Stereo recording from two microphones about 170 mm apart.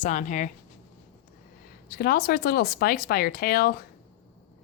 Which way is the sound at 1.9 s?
60° left (ahead or behind).